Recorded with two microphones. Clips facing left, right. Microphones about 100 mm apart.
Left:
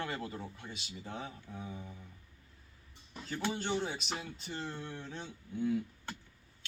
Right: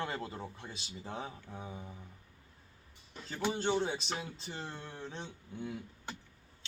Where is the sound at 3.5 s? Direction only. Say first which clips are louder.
Right 5 dB; 30° right (ahead or behind).